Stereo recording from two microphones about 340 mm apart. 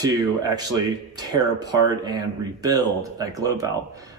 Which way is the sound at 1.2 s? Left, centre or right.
Centre.